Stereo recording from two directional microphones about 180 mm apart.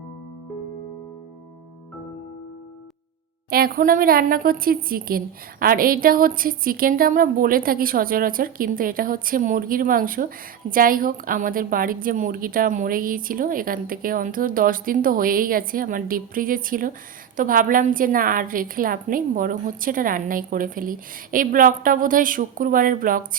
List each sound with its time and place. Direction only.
3.5 s a woman's voice: 55° right (ahead or behind)